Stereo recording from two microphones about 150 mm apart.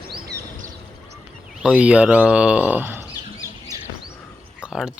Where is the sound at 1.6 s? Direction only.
5° right (ahead or behind).